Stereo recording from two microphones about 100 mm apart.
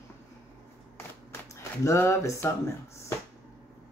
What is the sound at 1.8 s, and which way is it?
Speech, 30° left (ahead or behind).